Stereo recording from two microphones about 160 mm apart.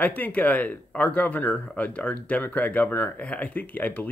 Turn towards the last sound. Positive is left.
turn(degrees=10)  # may be behind; listen again after turning